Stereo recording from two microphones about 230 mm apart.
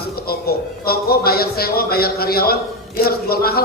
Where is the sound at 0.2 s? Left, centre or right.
Left.